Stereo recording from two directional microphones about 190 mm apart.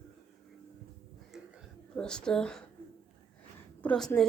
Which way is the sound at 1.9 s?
5° left (ahead or behind).